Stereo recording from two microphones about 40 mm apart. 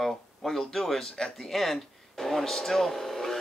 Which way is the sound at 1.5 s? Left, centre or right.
Centre.